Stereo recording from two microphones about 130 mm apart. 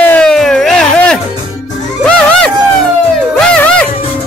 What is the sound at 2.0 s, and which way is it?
Music, 5° left (ahead or behind).